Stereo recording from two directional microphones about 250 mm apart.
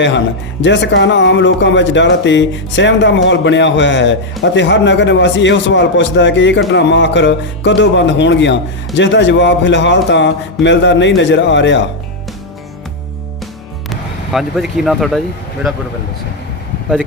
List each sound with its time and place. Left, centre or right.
0.6 s speech: left
13.9 s speech: centre